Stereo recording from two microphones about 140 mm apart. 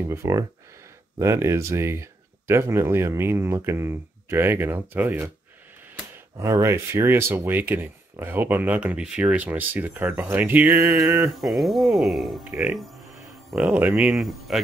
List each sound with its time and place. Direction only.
0.1 s speech: 20° right (ahead or behind); by 12.4 s centre (ahead or behind)
12.4 s speech: 10° right (ahead or behind)